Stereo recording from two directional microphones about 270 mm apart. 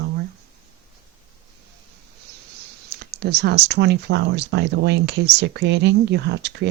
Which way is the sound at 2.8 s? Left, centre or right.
Right.